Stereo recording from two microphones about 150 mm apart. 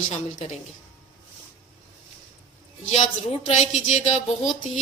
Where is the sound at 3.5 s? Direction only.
50° left (ahead or behind).